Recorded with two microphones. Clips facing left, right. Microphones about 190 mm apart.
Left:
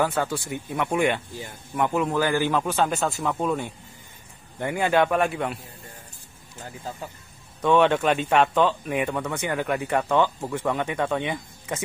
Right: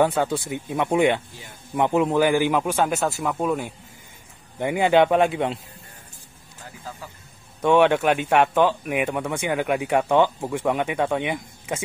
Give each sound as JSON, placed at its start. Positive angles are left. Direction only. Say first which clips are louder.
{"t": 0.0, "sound": "a man's voice", "louder": "right 4 dB", "side_deg": -20}
{"t": 4.6, "sound": "a man's voice", "louder": "right 4 dB", "side_deg": -15}
{"t": 7.6, "sound": "speech", "louder": "right 2 dB", "side_deg": -15}